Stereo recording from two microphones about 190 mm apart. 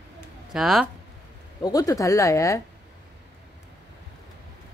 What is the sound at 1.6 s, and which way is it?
Speech, 20° left (ahead or behind).